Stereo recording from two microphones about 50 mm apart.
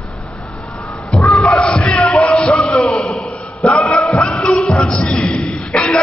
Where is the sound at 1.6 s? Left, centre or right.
Centre.